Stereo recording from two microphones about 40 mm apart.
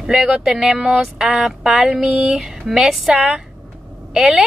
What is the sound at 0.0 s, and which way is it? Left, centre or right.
Speech, centre.